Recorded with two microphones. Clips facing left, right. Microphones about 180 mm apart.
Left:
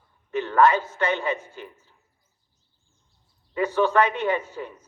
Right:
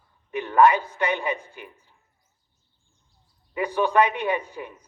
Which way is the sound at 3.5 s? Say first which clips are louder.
Left 1 dB; 15° right (ahead or behind).